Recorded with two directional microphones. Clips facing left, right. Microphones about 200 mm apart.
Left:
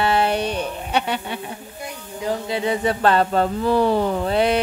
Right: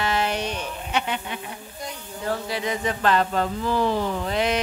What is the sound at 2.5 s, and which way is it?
Speech, 30° left (ahead or behind).